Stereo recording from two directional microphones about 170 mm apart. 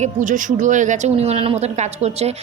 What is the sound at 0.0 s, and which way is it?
A woman's voice, 50° right (ahead or behind).